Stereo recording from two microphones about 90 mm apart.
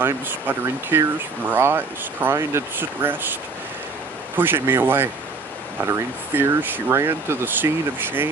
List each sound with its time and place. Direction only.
0.0 s speech: 25° right (ahead or behind)
4.4 s speech: 25° right (ahead or behind)